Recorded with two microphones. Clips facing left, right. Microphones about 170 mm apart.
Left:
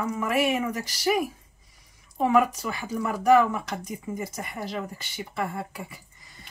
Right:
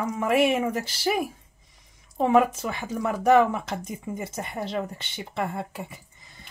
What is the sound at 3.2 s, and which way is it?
Speech, 25° right (ahead or behind).